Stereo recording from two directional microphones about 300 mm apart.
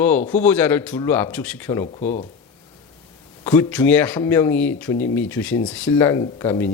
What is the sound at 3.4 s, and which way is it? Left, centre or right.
A man's voice, centre.